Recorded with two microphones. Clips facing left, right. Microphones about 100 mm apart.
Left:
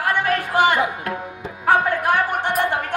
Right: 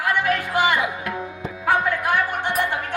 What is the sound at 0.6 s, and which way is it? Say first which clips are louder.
Tabla: left 2 dB; 40° left (ahead or behind).